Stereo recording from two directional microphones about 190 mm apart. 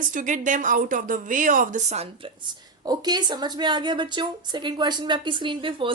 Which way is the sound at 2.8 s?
20° right (ahead or behind).